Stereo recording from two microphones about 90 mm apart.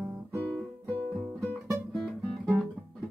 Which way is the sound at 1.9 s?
5° left (ahead or behind).